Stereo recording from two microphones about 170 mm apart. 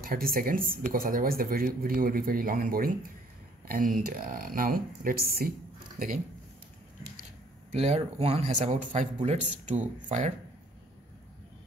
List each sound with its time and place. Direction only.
0.0 s speech: 60° right (ahead or behind)
7.7 s speech: 35° right (ahead or behind)